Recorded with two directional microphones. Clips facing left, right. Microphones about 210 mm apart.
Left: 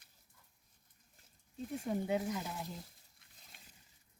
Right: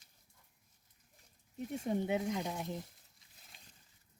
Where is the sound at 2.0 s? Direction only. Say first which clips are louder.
Right 1 dB; 20° right (ahead or behind).